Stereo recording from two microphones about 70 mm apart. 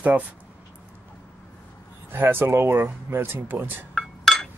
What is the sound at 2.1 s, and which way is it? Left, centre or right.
Speech, right.